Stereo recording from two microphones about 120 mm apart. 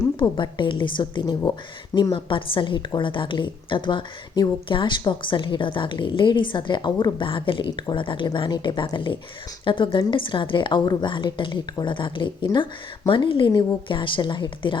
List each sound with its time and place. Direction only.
0.2 s a woman's voice: 40° left (ahead or behind)